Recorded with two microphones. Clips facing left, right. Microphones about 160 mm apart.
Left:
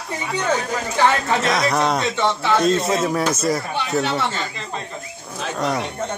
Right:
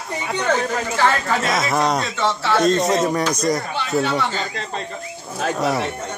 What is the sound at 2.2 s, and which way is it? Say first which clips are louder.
Speech: left 1 dB; 15° left (ahead or behind).